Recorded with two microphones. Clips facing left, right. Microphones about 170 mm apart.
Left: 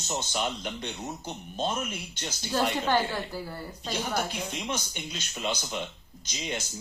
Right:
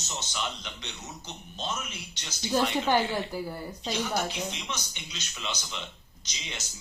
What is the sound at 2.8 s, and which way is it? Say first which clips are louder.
A woman's voice: right 1 dB; 15° right (ahead or behind).